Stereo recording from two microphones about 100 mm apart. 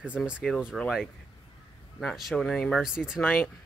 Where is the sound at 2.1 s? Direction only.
5° left (ahead or behind).